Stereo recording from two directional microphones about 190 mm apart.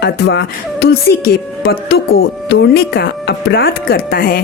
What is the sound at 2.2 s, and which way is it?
A woman's voice, 65° left (ahead or behind).